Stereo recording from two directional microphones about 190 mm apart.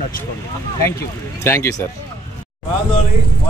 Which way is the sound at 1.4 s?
15° left (ahead or behind).